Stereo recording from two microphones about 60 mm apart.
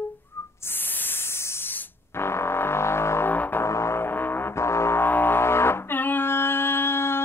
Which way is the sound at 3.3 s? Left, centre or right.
Left.